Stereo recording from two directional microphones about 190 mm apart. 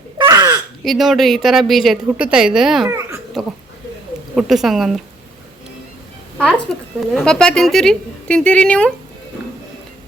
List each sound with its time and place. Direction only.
0.2 s a sound: 20° right (ahead or behind)
0.9 s a woman's voice: centre (ahead or behind)
6.7 s a woman's voice: centre (ahead or behind)